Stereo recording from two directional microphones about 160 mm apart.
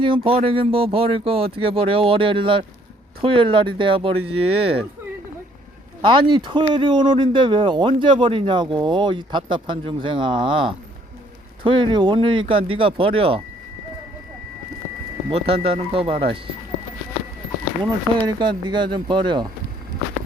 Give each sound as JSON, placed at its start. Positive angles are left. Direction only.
{"t": 0.0, "sound": "speech", "side_deg": -35}
{"t": 6.0, "sound": "speech", "side_deg": -30}
{"t": 15.3, "sound": "speech", "side_deg": -35}
{"t": 18.3, "sound": "speech", "side_deg": -30}